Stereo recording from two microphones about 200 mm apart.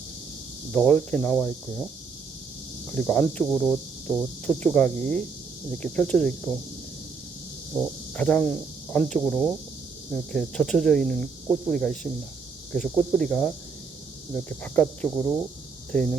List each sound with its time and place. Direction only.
0.7 s speech: 10° left (ahead or behind)
2.9 s speech: 5° left (ahead or behind)
7.8 s speech: 5° left (ahead or behind)